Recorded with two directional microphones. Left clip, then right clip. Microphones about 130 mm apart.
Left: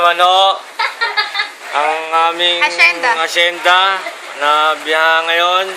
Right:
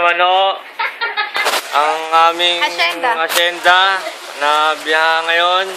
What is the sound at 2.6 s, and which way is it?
Speech, 15° right (ahead or behind).